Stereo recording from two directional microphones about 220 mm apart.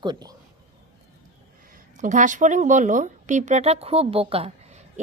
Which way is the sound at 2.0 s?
35° right (ahead or behind).